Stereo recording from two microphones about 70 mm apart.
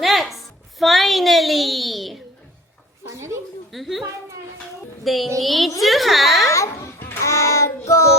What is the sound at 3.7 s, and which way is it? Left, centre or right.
Speech, centre.